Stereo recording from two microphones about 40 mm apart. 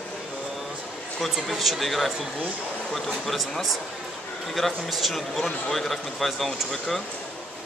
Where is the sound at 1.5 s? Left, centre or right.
Centre.